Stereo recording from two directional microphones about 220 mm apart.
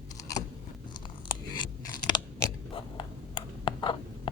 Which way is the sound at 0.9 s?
20° left (ahead or behind).